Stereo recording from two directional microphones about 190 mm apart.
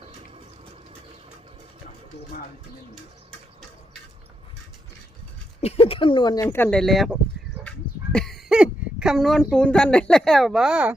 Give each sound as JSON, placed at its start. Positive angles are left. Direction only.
{"t": 5.5, "sound": "speech", "side_deg": 30}
{"t": 6.4, "sound": "speech", "side_deg": 10}